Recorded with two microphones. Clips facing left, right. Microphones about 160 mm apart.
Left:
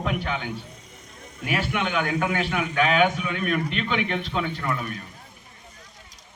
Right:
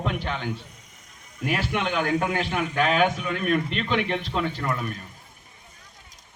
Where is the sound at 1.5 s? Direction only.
Centre (ahead or behind).